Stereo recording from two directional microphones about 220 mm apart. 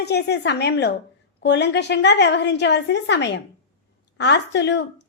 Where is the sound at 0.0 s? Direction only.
50° left (ahead or behind).